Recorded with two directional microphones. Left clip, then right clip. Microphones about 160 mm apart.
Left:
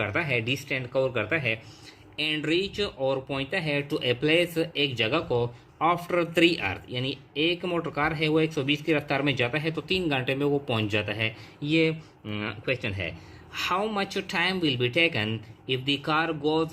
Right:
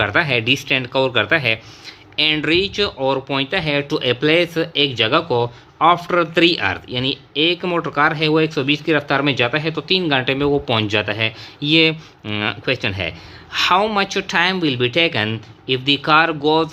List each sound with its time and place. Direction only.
0.0 s speech: 35° right (ahead or behind)
11.7 s speech: 35° right (ahead or behind)